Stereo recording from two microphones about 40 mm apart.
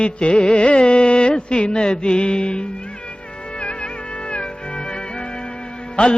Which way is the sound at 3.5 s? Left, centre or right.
Left.